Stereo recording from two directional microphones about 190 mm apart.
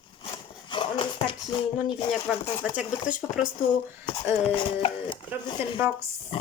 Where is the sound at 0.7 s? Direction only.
25° left (ahead or behind).